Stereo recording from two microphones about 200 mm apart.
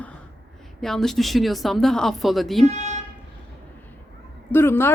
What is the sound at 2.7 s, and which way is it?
Speech, 35° right (ahead or behind).